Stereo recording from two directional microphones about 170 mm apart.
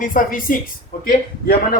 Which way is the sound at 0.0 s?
55° left (ahead or behind).